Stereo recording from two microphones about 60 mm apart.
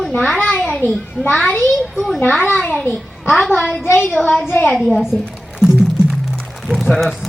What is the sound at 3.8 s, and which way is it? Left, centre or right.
Speech, left.